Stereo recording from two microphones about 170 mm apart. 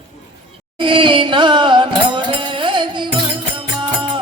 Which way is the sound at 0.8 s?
30° right (ahead or behind).